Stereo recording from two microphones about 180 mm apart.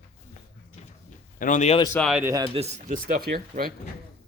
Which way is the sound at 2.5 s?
35° right (ahead or behind).